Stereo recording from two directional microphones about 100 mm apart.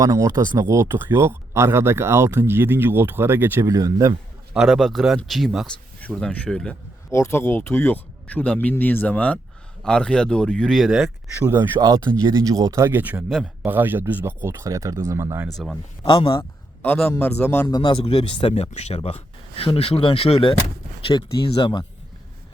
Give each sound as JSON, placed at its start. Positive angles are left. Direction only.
{"t": 0.0, "sound": "speech", "side_deg": -35}
{"t": 3.7, "sound": "speech", "side_deg": -35}
{"t": 4.5, "sound": "speech", "side_deg": 0}
{"t": 7.1, "sound": "speech", "side_deg": 25}
{"t": 11.3, "sound": "speech", "side_deg": -25}
{"t": 11.8, "sound": "speech", "side_deg": -35}
{"t": 15.5, "sound": "speech", "side_deg": 5}
{"t": 16.0, "sound": "a man's voice", "side_deg": 65}
{"t": 16.4, "sound": "a sound", "side_deg": 20}
{"t": 17.1, "sound": "speech", "side_deg": 20}
{"t": 17.7, "sound": "speech", "side_deg": 50}
{"t": 21.0, "sound": "speech", "side_deg": 45}